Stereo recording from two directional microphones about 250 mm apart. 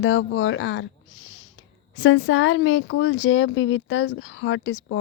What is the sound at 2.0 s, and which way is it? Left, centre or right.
Speech, left.